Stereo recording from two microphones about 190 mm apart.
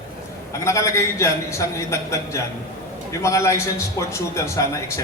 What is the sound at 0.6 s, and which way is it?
A man's voice, 15° left (ahead or behind).